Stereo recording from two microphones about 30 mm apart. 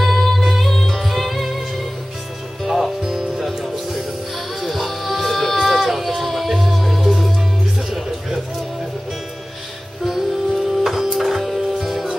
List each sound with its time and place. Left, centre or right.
0.0 s music: centre
3.0 s music: centre
4.6 s a sound: centre
10.0 s music: centre